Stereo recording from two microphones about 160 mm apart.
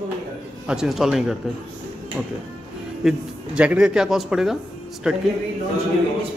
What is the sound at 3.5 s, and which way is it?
A man's voice, 5° right (ahead or behind).